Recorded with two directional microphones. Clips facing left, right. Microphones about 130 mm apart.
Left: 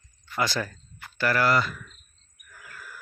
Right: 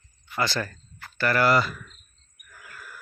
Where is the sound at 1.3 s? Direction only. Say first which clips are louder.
Right 3 dB; 5° right (ahead or behind).